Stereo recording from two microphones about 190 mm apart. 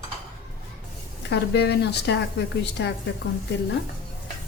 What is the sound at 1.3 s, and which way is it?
A woman's voice, 60° left (ahead or behind).